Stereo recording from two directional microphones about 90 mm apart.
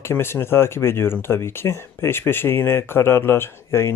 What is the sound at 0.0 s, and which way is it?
Speech, 25° left (ahead or behind).